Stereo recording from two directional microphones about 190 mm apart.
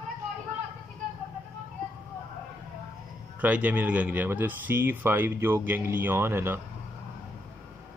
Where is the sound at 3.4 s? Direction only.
10° right (ahead or behind).